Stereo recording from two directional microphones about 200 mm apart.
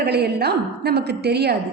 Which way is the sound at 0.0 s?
55° right (ahead or behind).